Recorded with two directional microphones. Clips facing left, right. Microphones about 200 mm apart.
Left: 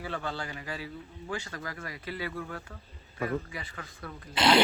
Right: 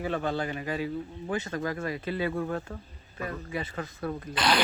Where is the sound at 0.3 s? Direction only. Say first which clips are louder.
Right 7 dB; 20° right (ahead or behind).